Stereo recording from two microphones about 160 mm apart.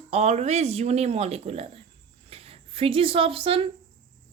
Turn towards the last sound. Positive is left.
turn(degrees=-35)  # may be behind; listen again after turning